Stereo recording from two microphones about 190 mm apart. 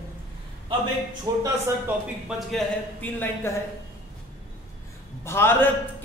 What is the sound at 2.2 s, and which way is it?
A man's voice, 5° left (ahead or behind).